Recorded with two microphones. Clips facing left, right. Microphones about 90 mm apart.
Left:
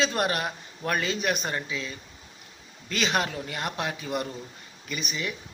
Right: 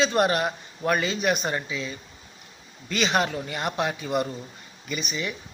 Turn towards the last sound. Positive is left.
turn(degrees=0)  # may be behind; listen again after turning